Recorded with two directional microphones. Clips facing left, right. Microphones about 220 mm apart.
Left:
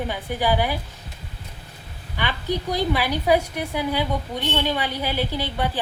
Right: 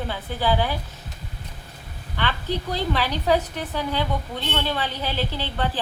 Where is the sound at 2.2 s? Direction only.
15° left (ahead or behind).